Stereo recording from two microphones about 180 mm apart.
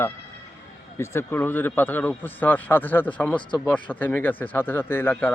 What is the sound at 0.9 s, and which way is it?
A man's voice, 15° left (ahead or behind).